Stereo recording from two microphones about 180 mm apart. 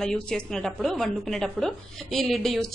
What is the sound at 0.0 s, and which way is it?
A woman's voice, 5° left (ahead or behind).